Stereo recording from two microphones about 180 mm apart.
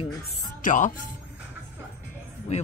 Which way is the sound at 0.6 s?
45° left (ahead or behind).